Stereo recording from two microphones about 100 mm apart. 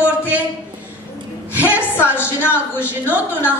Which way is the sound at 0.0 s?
20° left (ahead or behind).